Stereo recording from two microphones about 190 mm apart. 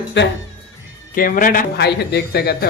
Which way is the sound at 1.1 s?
45° left (ahead or behind).